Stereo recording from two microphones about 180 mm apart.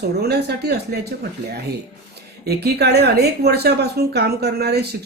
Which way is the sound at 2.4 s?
65° right (ahead or behind).